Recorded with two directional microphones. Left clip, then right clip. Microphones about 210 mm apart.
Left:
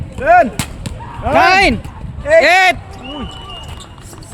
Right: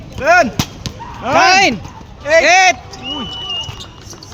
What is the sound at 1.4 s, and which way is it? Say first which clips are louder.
Speech: even; 35° left (ahead or behind).